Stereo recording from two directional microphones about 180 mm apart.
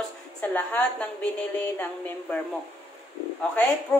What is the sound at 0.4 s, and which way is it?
Speech, 10° left (ahead or behind).